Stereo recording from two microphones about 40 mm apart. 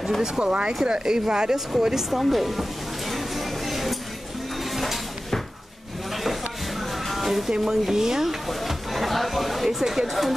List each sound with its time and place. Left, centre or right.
0.4 s speech: right; by 2.6 s centre
3.1 s music: centre
4.6 s a sound: centre
6.8 s music: centre
7.6 s speech: centre